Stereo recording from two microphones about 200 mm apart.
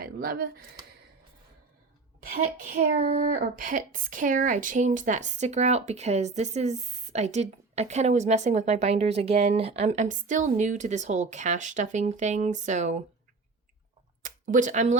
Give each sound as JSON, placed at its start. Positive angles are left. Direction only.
{"t": 0.0, "sound": "speech", "side_deg": -45}
{"t": 2.2, "sound": "speech", "side_deg": -45}
{"t": 14.3, "sound": "speech", "side_deg": -40}